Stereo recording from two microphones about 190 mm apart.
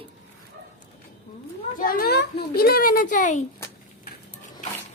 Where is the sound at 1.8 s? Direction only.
50° left (ahead or behind).